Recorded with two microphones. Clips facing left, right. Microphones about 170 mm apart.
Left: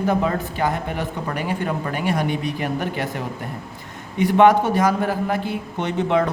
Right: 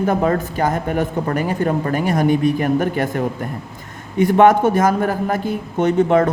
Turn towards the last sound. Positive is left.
turn(degrees=-45)  # may be behind; listen again after turning